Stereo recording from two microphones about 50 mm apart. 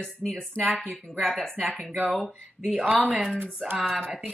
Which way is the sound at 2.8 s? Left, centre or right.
Right.